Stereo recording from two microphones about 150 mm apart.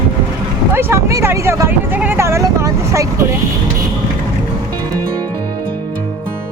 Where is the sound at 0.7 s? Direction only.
15° right (ahead or behind).